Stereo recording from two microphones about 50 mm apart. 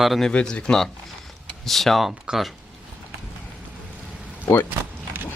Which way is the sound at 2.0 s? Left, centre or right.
Centre.